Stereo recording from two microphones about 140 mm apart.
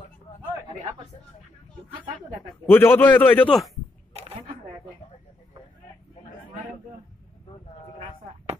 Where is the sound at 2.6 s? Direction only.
15° left (ahead or behind).